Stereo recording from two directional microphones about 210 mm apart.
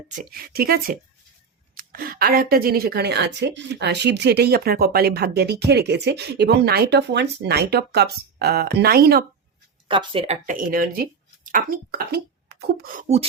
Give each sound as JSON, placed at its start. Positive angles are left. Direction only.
{"t": 0.1, "sound": "speech", "side_deg": -40}
{"t": 9.9, "sound": "speech", "side_deg": -25}
{"t": 10.4, "sound": "speech", "side_deg": -40}